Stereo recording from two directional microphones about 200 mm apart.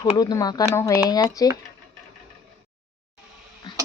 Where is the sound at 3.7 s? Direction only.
20° left (ahead or behind).